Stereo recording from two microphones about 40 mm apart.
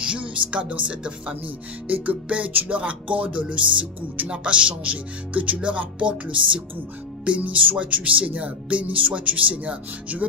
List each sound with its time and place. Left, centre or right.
0.0 s speech: right